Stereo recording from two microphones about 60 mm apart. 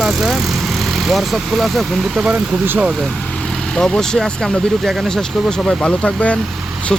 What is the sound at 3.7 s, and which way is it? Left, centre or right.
Speech, centre.